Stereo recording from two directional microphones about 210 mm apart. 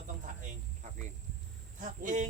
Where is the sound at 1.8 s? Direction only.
35° right (ahead or behind).